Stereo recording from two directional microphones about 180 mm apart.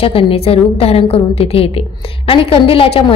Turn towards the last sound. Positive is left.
turn(degrees=30)  # may be behind; listen again after turning